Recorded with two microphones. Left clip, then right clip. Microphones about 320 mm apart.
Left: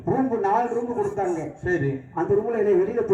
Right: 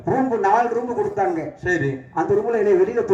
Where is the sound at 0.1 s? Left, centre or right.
Right.